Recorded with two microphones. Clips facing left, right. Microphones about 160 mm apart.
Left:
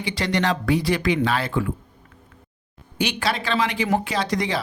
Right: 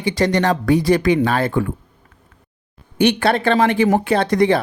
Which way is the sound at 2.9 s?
55° right (ahead or behind).